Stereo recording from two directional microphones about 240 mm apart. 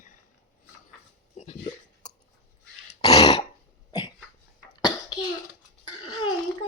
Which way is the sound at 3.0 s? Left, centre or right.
Left.